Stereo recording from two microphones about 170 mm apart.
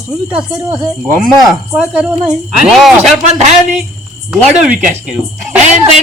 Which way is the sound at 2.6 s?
Centre (ahead or behind).